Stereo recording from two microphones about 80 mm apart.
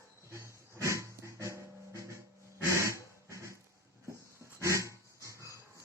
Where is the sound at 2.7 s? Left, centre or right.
Right.